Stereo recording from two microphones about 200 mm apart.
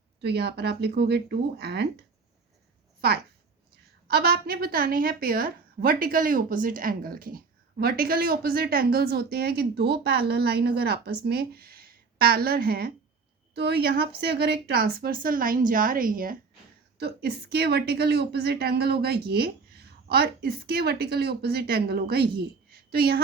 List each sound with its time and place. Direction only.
0.2 s speech: 55° right (ahead or behind)
4.1 s a woman's voice: 50° right (ahead or behind)